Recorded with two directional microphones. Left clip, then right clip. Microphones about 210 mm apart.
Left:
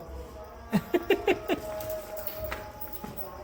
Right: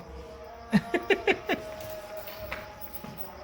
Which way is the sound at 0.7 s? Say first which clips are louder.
Even; 35° right (ahead or behind).